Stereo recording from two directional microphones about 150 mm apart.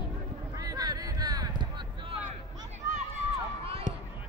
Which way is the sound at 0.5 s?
25° right (ahead or behind).